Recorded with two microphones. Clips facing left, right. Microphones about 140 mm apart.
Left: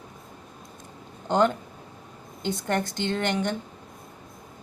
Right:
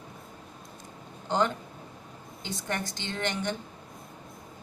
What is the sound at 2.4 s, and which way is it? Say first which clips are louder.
A woman's voice: left 7 dB; 55° left (ahead or behind).